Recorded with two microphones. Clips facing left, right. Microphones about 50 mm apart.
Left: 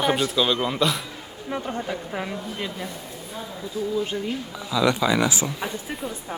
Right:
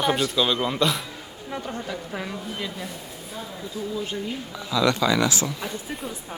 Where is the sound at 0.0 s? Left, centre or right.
Centre.